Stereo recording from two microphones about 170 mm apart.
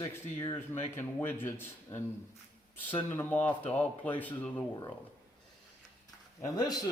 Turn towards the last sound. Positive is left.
turn(degrees=20)  # may be behind; listen again after turning